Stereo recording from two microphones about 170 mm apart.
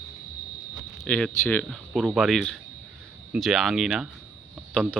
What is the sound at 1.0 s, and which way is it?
Speech, 5° left (ahead or behind).